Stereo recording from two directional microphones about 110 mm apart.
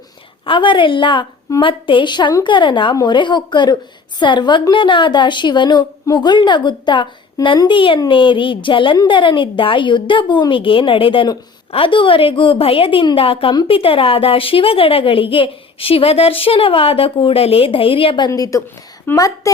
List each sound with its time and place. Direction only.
0.4 s a woman's voice: 50° left (ahead or behind)
2.9 s a woman's voice: 35° left (ahead or behind)
3.2 s a woman's voice: 45° left (ahead or behind)
18.3 s a woman's voice: 30° left (ahead or behind)
19.1 s a woman's voice: 20° left (ahead or behind)